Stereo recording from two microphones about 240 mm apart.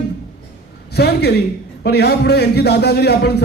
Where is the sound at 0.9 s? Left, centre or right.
Left.